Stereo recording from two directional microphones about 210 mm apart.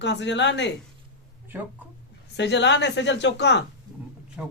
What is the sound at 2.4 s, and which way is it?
Speech, 55° left (ahead or behind).